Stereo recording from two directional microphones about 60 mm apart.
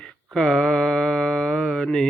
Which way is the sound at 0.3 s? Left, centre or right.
Centre.